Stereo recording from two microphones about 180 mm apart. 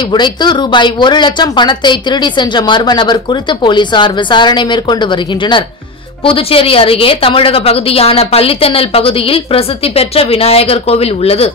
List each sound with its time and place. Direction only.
0.1 s a woman's voice: 25° left (ahead or behind)